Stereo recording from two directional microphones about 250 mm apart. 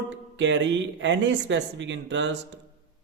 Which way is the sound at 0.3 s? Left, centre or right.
Right.